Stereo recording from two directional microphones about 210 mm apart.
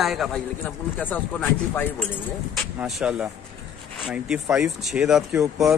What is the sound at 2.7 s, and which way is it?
A man's voice, 5° right (ahead or behind).